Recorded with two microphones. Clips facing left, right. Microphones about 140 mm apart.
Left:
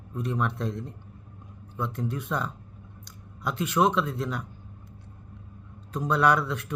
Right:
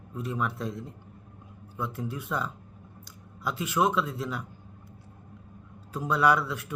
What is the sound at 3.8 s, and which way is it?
Speech, 15° left (ahead or behind).